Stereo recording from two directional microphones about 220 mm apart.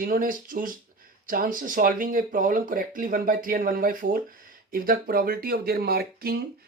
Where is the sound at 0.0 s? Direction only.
40° right (ahead or behind).